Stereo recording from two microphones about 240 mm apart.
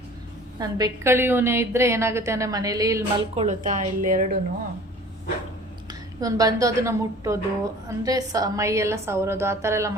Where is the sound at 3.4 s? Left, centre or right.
Right.